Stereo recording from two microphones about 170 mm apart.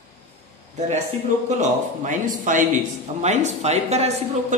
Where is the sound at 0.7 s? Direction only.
45° right (ahead or behind).